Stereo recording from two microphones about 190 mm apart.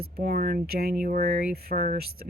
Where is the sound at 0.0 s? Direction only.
50° right (ahead or behind).